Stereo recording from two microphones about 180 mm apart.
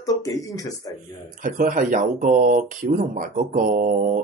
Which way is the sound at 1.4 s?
50° right (ahead or behind).